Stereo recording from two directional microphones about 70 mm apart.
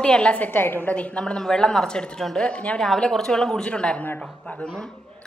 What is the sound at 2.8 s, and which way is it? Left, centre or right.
A woman's voice, centre.